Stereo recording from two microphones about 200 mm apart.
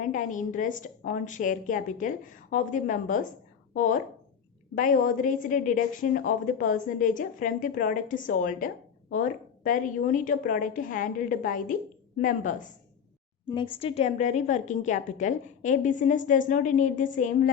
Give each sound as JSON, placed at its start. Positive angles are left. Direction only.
{"t": 0.0, "sound": "a woman's voice", "side_deg": 40}
{"t": 13.5, "sound": "a woman's voice", "side_deg": 25}